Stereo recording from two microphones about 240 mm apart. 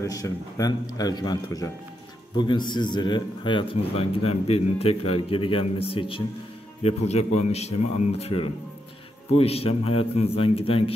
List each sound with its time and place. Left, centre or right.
0.0 s a man's voice: centre